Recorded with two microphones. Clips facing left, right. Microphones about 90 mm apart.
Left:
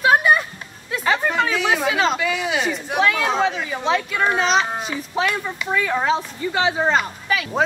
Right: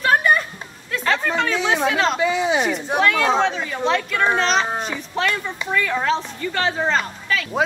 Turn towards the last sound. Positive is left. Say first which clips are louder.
# left 1 dB
turn(degrees=15)  # may be behind; listen again after turning